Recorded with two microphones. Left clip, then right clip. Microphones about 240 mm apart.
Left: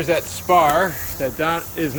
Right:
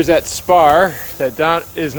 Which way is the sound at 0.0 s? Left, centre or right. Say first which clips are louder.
Right 7 dB; right.